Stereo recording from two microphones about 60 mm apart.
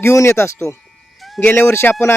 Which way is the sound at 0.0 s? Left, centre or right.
Left.